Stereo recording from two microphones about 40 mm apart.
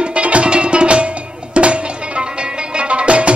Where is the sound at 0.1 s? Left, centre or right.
Right.